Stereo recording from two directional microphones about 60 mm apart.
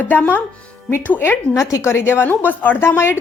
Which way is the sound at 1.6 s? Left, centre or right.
Left.